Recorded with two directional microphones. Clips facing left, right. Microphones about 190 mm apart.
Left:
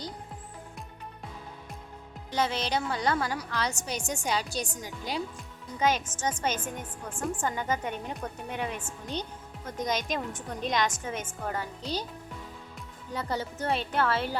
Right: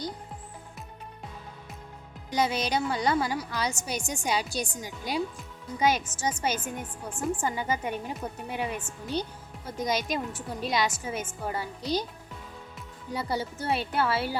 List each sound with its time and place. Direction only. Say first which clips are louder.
2.3 s a woman's voice: right 2 dB; 10° right (ahead or behind)
13.1 s a woman's voice: right 1 dB; 10° right (ahead or behind)